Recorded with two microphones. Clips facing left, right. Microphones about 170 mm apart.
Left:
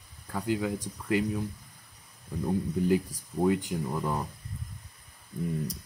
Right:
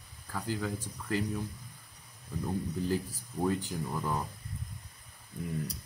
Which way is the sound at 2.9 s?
15° left (ahead or behind).